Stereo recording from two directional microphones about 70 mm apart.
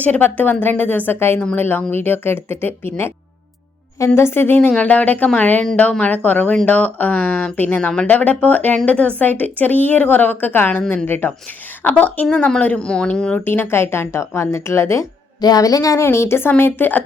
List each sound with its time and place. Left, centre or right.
0.0 s speech: left
3.9 s speech: left; by 13.4 s centre
13.4 s speech: left
15.4 s a woman's voice: left
16.0 s speech: left